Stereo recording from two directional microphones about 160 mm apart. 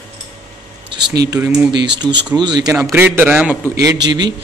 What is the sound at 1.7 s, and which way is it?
Speech, 90° right.